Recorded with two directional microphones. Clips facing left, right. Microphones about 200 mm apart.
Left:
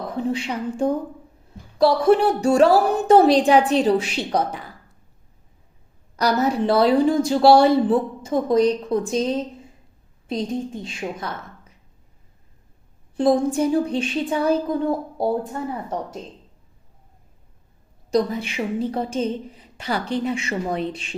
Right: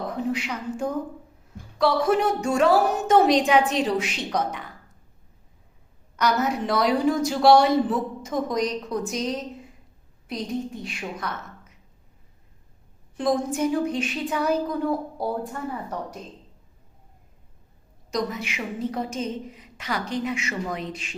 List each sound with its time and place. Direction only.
0.2 s a woman's voice: 30° left (ahead or behind)
6.1 s a woman's voice: 35° left (ahead or behind)
13.1 s a woman's voice: 30° left (ahead or behind)
18.1 s a woman's voice: 30° left (ahead or behind)